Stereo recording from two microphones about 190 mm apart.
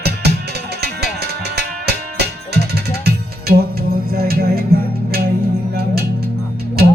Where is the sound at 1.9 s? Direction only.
60° right (ahead or behind).